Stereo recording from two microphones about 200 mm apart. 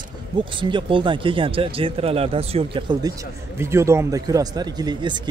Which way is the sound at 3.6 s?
15° right (ahead or behind).